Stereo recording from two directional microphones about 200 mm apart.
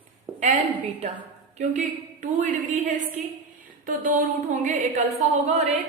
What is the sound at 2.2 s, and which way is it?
Speech, 40° right (ahead or behind).